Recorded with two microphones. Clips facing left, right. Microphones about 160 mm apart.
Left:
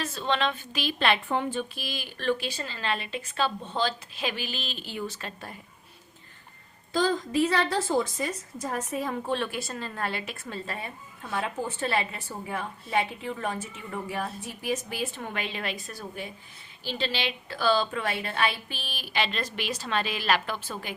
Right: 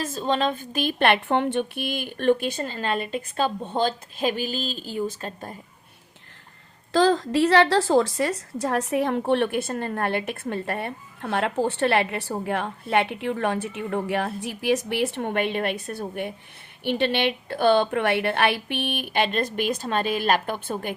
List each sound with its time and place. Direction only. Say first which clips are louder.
0.1 s a woman's voice: right 4 dB; 40° right (ahead or behind)
6.9 s a woman's voice: right 6 dB; 80° right; by 20.9 s 50° right (ahead or behind)